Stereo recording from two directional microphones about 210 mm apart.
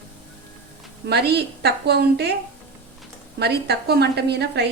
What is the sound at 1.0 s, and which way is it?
A woman's voice, 50° right (ahead or behind).